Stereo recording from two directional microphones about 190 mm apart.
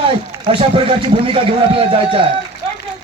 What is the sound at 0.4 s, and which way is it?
A man's voice, 25° right (ahead or behind).